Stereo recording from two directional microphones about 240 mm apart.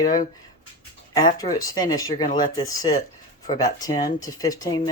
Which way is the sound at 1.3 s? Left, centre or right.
Centre.